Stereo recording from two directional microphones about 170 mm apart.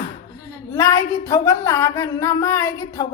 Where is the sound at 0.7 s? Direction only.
15° left (ahead or behind).